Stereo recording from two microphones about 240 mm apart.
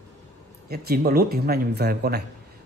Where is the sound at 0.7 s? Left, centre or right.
Right.